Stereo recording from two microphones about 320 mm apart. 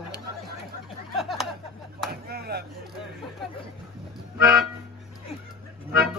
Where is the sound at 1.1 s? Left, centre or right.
Centre.